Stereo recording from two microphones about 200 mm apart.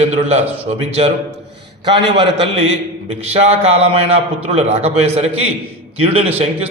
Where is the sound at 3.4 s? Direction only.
30° right (ahead or behind).